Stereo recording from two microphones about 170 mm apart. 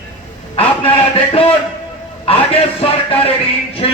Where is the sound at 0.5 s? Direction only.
35° left (ahead or behind).